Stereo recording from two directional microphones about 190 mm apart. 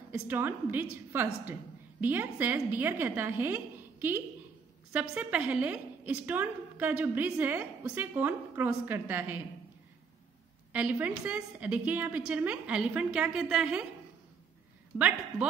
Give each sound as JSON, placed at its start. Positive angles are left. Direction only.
{"t": 0.3, "sound": "a woman's voice", "side_deg": -10}
{"t": 10.7, "sound": "a woman's voice", "side_deg": -10}
{"t": 15.0, "sound": "a woman's voice", "side_deg": -5}